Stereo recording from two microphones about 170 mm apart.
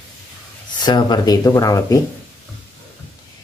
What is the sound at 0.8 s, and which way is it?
Speech, 25° left (ahead or behind).